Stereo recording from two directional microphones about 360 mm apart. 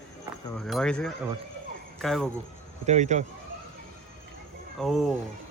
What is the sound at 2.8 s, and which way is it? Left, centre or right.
Speech, centre.